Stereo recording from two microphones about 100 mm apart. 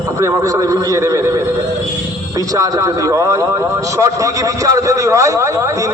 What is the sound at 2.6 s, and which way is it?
A man's voice, 35° right (ahead or behind).